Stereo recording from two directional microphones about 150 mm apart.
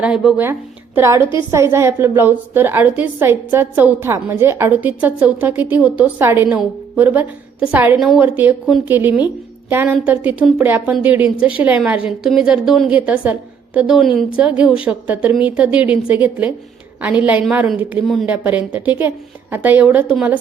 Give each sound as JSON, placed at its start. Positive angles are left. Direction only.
{"t": 0.0, "sound": "a woman's voice", "side_deg": -5}
{"t": 8.2, "sound": "a woman's voice", "side_deg": -15}
{"t": 18.3, "sound": "a woman's voice", "side_deg": -10}